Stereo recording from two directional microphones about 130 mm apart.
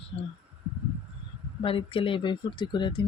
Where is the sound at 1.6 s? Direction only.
45° left (ahead or behind).